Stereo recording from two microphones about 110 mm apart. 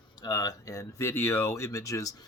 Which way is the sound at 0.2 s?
35° left (ahead or behind).